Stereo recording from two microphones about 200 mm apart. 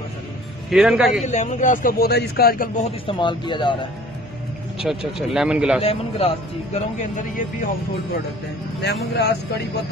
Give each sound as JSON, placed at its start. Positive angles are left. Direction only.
{"t": 0.7, "sound": "speech", "side_deg": -5}
{"t": 1.2, "sound": "a man's voice", "side_deg": 35}
{"t": 2.8, "sound": "speech", "side_deg": 25}
{"t": 4.8, "sound": "speech", "side_deg": 0}
{"t": 5.8, "sound": "speech", "side_deg": 30}
{"t": 9.1, "sound": "speech", "side_deg": 55}